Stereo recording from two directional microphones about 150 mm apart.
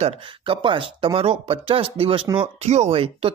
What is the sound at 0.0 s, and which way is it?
Speech, 35° right (ahead or behind).